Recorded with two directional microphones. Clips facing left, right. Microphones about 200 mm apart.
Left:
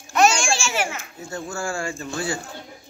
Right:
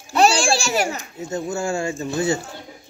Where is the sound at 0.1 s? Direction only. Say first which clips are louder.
Right 2 dB; 35° right (ahead or behind).